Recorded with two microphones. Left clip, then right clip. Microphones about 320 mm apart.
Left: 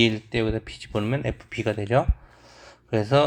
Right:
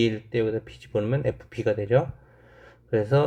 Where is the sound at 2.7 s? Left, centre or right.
Left.